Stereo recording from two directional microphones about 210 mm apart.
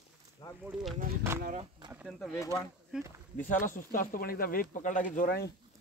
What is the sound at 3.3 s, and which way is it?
Speech, 40° left (ahead or behind).